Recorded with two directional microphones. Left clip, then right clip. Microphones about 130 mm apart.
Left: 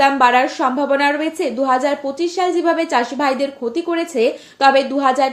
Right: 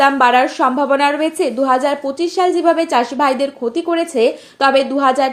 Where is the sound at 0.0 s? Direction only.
50° right (ahead or behind).